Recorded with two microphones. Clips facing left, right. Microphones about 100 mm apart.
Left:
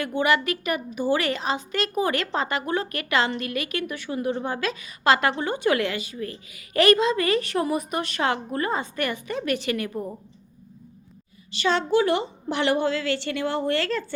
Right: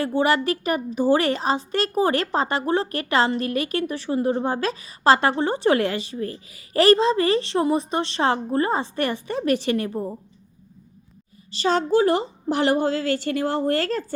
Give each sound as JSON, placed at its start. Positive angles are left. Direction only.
{"t": 0.0, "sound": "a woman's voice", "side_deg": -35}
{"t": 11.5, "sound": "a woman's voice", "side_deg": -40}